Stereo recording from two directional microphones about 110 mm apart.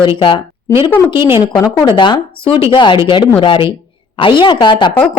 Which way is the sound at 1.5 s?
35° left (ahead or behind).